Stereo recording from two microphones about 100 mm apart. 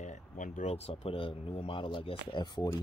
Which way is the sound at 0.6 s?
90° left.